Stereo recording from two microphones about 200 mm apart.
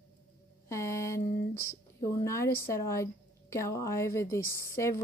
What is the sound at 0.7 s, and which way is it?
Speech, 15° left (ahead or behind).